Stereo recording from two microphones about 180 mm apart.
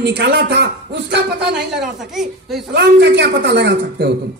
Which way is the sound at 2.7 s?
75° right (ahead or behind).